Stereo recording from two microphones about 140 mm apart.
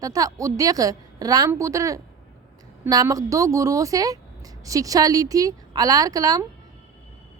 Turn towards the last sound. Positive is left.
turn(degrees=-25)  # may be behind; listen again after turning